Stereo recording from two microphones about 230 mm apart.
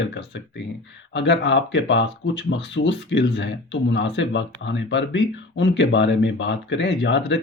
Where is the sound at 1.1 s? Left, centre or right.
Left.